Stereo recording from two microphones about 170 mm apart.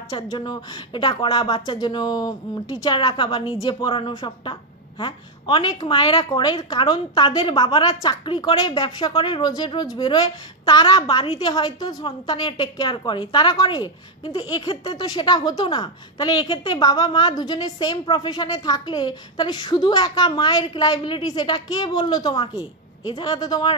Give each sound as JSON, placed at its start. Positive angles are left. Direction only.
{"t": 0.1, "sound": "a woman's voice", "side_deg": 25}